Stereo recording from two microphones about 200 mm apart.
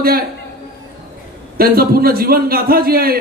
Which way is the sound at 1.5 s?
50° right (ahead or behind).